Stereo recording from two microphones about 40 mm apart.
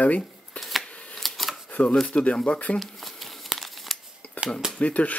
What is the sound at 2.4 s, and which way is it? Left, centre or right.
Speech, left.